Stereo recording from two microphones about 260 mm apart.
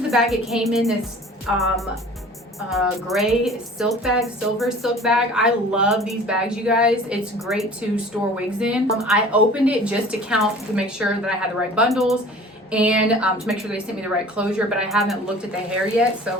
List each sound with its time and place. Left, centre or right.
0.1 s a woman's voice: centre